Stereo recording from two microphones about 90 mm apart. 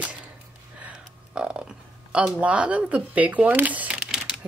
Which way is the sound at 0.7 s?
15° right (ahead or behind).